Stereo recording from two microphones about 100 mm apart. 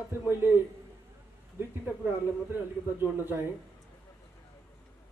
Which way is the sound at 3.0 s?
20° right (ahead or behind).